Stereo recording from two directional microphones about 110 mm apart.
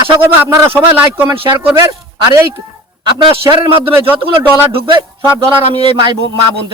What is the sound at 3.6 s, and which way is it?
Speech, 55° right (ahead or behind).